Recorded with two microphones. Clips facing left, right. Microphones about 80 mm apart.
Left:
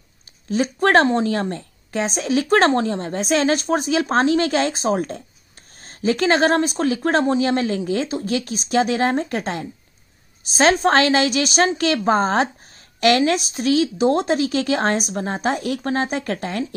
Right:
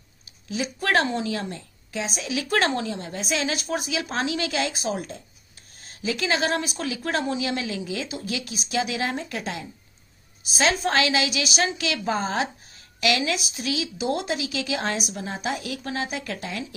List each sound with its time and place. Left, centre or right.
0.5 s a woman's voice: left